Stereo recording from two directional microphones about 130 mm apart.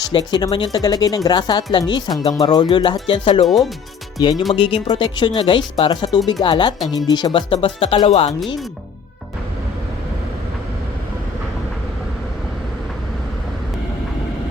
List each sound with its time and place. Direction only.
0.1 s speech: 35° left (ahead or behind)
3.4 s speech: centre (ahead or behind)
4.2 s speech: 35° left (ahead or behind)
7.5 s speech: 45° left (ahead or behind)